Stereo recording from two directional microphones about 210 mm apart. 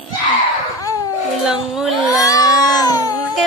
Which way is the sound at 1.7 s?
Centre (ahead or behind).